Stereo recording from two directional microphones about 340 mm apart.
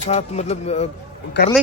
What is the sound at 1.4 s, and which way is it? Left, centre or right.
Speech, left.